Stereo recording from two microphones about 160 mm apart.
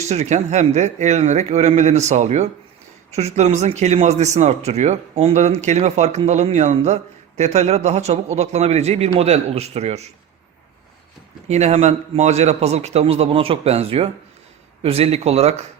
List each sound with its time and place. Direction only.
0.0 s speech: 45° right (ahead or behind)
11.4 s a man's voice: 45° right (ahead or behind)